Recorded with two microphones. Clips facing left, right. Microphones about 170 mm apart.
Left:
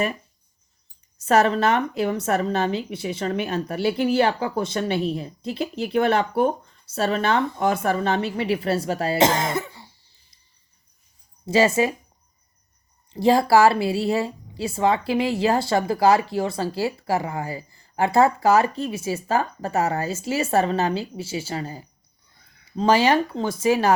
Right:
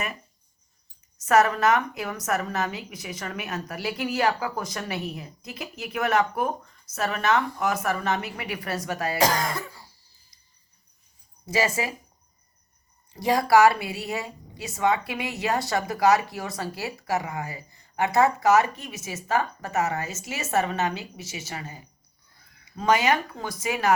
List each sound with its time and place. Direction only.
1.2 s a woman's voice: 30° left (ahead or behind)
11.4 s a woman's voice: 25° left (ahead or behind)
13.1 s a woman's voice: 30° left (ahead or behind)